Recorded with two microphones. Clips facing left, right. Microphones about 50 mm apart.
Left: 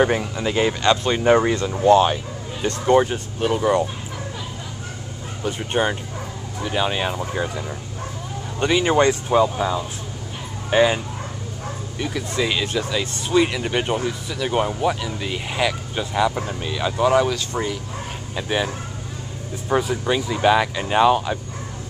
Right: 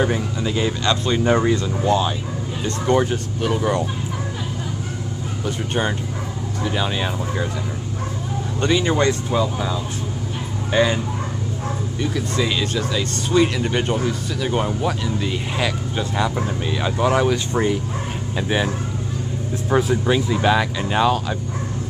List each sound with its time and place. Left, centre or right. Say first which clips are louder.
0.0 s speech: left 2 dB; left
1.9 s speech: left 6 dB; left
2.9 s speech: left 2 dB; centre
5.7 s speech: left 3 dB; centre
8.5 s speech: left 2 dB; centre
10.7 s speech: left 2 dB; centre
12.0 s speech: right 1 dB; centre
18.3 s speech: right 1 dB; centre
19.7 s speech: right 2 dB; centre